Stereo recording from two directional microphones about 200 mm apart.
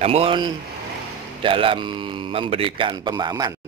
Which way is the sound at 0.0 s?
30° right (ahead or behind).